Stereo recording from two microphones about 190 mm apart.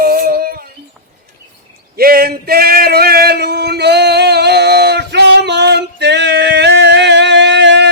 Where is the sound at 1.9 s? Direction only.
50° right (ahead or behind).